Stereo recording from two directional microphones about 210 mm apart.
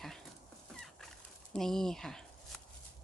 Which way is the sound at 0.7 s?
Centre (ahead or behind).